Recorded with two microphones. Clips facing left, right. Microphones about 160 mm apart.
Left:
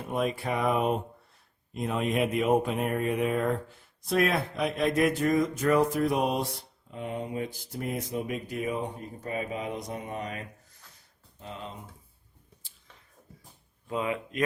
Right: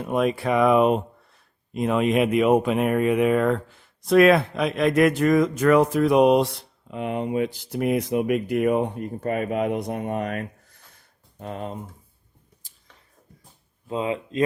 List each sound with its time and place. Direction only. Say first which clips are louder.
0.1 s speech: right 7 dB; 80° right; by 11.8 s 50° right (ahead or behind)
12.6 s a sound: right 1 dB; 40° right (ahead or behind)
13.8 s speech: right 4 dB; 25° right (ahead or behind)